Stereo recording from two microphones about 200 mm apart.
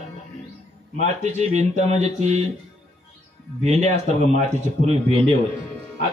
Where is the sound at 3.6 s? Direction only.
35° right (ahead or behind).